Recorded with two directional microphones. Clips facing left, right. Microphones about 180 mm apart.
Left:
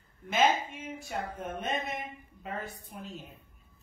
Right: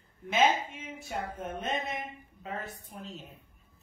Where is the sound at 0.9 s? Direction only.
Centre (ahead or behind).